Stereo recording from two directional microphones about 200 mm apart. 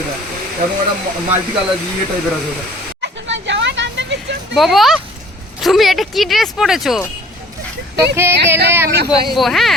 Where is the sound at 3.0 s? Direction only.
65° right (ahead or behind).